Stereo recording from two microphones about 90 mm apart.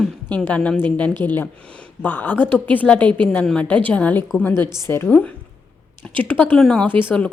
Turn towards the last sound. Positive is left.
turn(degrees=15)  # may be behind; listen again after turning